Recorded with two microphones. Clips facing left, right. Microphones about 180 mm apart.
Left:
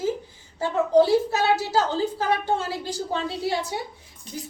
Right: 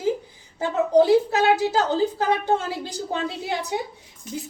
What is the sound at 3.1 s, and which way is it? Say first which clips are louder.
Speech: left 1 dB; 20° right (ahead or behind).